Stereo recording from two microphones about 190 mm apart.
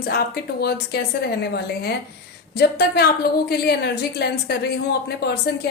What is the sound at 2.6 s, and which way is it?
A woman's voice, 60° left (ahead or behind).